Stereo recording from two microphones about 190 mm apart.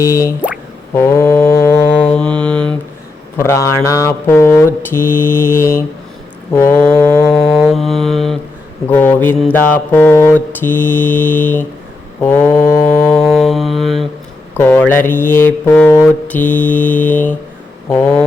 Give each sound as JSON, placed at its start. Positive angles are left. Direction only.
{"t": 0.0, "sound": "speech", "side_deg": 15}
{"t": 0.9, "sound": "mantra", "side_deg": 15}
{"t": 3.3, "sound": "speech", "side_deg": 15}
{"t": 7.5, "sound": "music", "side_deg": 0}
{"t": 8.9, "sound": "speech", "side_deg": 10}
{"t": 12.9, "sound": "music", "side_deg": 10}
{"t": 13.2, "sound": "mantra", "side_deg": 0}
{"t": 14.5, "sound": "speech", "side_deg": 10}